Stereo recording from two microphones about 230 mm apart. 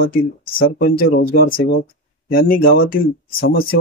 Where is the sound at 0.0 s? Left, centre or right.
Left.